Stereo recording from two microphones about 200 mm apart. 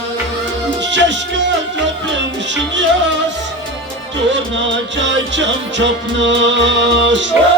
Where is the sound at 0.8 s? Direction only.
65° right (ahead or behind).